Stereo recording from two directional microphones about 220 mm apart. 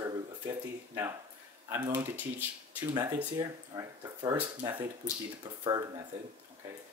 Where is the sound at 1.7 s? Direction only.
15° right (ahead or behind).